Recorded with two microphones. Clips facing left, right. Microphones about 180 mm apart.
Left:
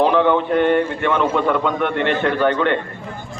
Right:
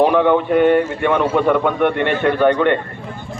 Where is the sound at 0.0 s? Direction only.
15° right (ahead or behind).